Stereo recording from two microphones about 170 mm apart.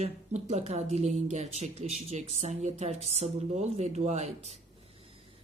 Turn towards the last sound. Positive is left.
turn(degrees=-40)  # may be behind; listen again after turning